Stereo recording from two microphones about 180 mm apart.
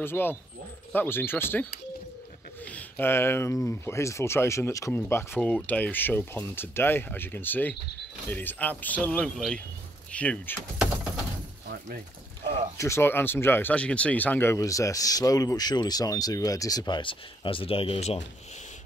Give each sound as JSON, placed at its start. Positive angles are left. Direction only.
{"t": 0.0, "sound": "speech", "side_deg": 10}
{"t": 2.7, "sound": "speech", "side_deg": 10}
{"t": 12.7, "sound": "speech", "side_deg": 15}